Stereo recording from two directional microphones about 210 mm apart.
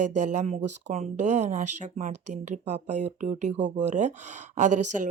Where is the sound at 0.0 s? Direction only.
35° right (ahead or behind).